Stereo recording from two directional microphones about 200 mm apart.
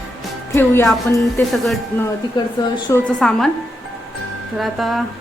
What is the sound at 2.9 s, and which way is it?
Speech, 5° left (ahead or behind).